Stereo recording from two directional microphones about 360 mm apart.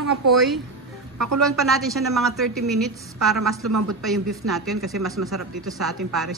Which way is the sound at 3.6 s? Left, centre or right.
Right.